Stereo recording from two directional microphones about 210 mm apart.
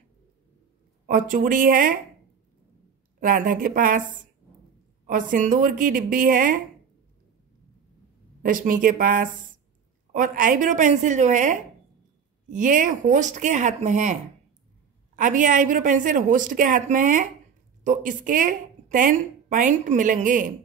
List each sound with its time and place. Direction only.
1.0 s a woman's voice: 40° right (ahead or behind)
3.2 s a woman's voice: 40° right (ahead or behind)
5.0 s a woman's voice: 40° right (ahead or behind)
8.4 s a woman's voice: 40° right (ahead or behind)
15.1 s a woman's voice: 40° right (ahead or behind)